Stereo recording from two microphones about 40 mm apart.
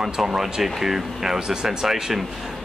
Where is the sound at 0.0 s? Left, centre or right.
Centre.